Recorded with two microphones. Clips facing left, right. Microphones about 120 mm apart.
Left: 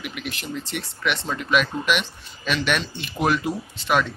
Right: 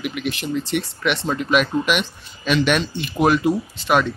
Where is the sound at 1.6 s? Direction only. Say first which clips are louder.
Right 3 dB; 5° right (ahead or behind).